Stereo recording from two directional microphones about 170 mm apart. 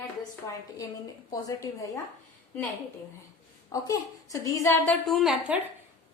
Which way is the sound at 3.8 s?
20° left (ahead or behind).